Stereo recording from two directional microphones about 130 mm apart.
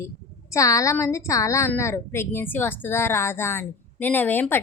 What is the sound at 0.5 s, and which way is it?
A woman's voice, 25° left (ahead or behind).